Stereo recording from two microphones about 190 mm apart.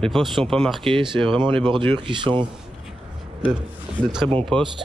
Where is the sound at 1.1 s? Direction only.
25° right (ahead or behind).